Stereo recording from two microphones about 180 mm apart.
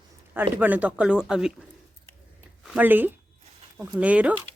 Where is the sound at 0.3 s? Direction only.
10° right (ahead or behind).